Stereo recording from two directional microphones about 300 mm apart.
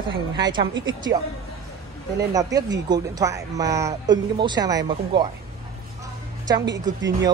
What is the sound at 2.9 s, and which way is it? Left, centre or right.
Speech, centre.